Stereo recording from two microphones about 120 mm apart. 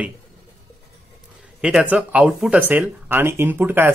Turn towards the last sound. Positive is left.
turn(degrees=-15)  # may be behind; listen again after turning